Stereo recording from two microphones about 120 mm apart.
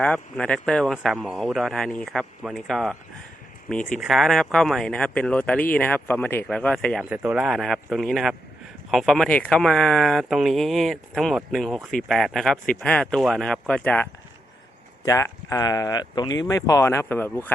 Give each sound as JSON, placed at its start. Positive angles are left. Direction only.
{"t": 0.0, "sound": "speech", "side_deg": 10}
{"t": 2.4, "sound": "speech", "side_deg": 0}
{"t": 3.9, "sound": "speech", "side_deg": 0}
{"t": 7.0, "sound": "speech", "side_deg": -10}
{"t": 15.0, "sound": "speech", "side_deg": 25}